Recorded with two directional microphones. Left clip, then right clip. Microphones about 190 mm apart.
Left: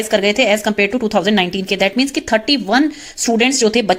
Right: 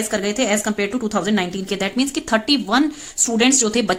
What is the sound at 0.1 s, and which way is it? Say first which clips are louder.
A woman's voice: left 8 dB; 15° left (ahead or behind).